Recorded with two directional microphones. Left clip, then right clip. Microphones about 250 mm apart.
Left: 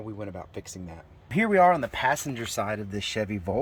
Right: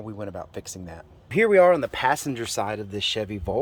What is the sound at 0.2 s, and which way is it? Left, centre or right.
Speech, centre.